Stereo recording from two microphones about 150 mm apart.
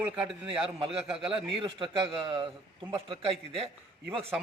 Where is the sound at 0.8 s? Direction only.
40° right (ahead or behind).